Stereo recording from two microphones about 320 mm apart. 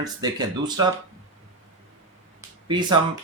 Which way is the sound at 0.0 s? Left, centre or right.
Centre.